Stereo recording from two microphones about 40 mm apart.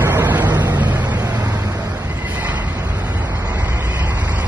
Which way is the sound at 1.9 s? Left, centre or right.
Right.